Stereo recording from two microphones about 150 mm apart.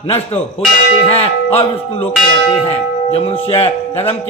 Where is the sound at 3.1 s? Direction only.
40° left (ahead or behind).